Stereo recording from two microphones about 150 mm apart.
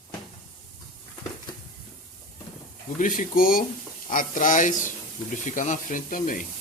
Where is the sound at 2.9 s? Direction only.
60° left (ahead or behind).